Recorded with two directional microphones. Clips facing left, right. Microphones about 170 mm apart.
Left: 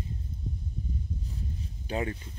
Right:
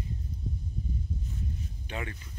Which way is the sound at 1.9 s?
35° left (ahead or behind).